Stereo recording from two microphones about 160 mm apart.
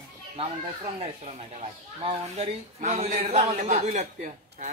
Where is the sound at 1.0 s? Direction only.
40° right (ahead or behind).